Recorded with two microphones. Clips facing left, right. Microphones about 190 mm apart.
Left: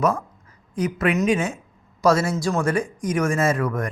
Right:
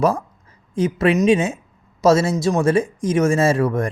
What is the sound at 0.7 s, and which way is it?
Speech, 25° right (ahead or behind).